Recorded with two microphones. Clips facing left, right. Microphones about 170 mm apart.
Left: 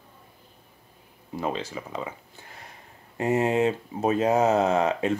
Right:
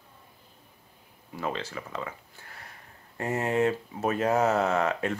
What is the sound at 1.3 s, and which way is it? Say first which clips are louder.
Speech: left 3 dB; 15° left (ahead or behind).